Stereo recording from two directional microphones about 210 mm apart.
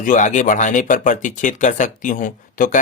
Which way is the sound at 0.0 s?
35° left (ahead or behind).